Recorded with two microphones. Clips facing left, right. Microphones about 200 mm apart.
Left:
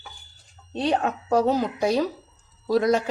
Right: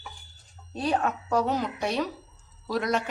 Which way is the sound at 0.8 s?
30° left (ahead or behind).